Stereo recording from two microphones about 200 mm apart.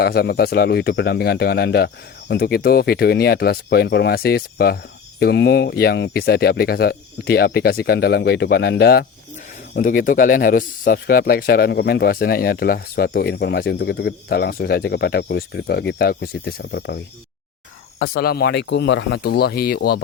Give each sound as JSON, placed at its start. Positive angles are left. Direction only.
{"t": 0.0, "sound": "speech", "side_deg": 50}
{"t": 18.0, "sound": "speech", "side_deg": 50}